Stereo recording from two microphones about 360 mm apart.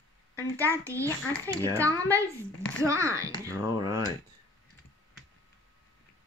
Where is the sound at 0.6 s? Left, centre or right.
Centre.